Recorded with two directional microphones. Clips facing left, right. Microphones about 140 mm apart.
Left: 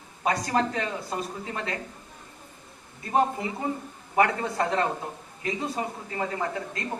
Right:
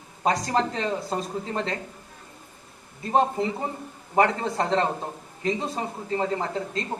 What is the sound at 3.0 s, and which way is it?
Speech, 30° right (ahead or behind).